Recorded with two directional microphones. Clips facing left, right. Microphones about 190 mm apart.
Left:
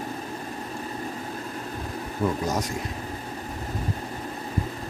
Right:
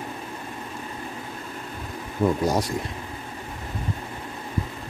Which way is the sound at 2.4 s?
35° right (ahead or behind).